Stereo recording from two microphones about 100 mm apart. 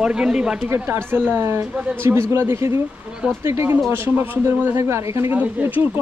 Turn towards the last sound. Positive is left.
turn(degrees=-20)  # may be behind; listen again after turning